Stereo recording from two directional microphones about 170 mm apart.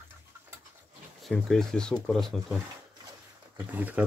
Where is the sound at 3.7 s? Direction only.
10° right (ahead or behind).